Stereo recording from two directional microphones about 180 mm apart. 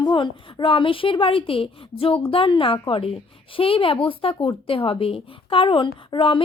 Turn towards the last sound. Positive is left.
turn(degrees=30)  # may be behind; listen again after turning